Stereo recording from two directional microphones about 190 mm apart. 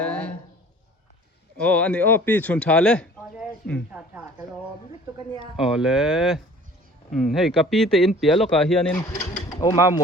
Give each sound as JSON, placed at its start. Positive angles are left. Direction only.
{"t": 0.0, "sound": "a sound", "side_deg": 5}
{"t": 1.5, "sound": "speech", "side_deg": 5}
{"t": 5.5, "sound": "speech", "side_deg": -5}
{"t": 9.0, "sound": "speech", "side_deg": 15}